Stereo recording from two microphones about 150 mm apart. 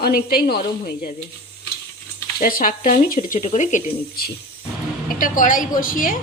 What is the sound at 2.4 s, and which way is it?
Speech, 65° left (ahead or behind).